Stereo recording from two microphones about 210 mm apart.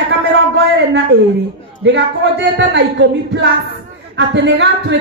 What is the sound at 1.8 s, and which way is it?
A woman's voice, 60° right (ahead or behind).